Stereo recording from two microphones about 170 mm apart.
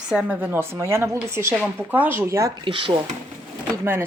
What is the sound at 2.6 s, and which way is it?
Speech, 30° right (ahead or behind).